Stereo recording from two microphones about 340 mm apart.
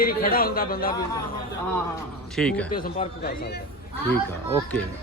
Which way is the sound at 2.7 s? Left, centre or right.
Left.